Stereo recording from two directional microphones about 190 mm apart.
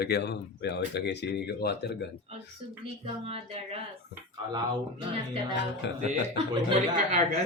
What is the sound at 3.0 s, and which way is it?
Speech, 30° right (ahead or behind).